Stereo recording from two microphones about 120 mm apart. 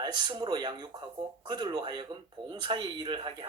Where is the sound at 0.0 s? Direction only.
35° right (ahead or behind).